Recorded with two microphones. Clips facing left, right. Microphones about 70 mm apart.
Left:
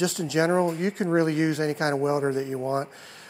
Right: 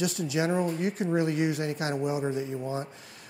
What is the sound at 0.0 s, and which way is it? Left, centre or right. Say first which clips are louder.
Speech: left 4 dB; left.